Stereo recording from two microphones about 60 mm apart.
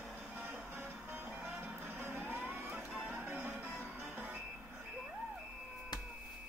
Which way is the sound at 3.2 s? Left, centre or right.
Right.